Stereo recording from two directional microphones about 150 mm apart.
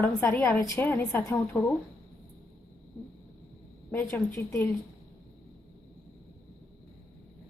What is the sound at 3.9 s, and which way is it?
Speech, 10° left (ahead or behind).